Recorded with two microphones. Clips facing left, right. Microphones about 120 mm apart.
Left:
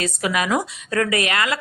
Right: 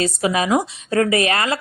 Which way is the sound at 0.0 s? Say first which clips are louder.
Right 3 dB; 30° right (ahead or behind).